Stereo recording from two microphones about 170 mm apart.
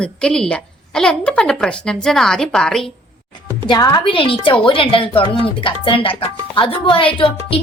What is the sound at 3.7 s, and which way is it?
A woman's voice, 25° left (ahead or behind).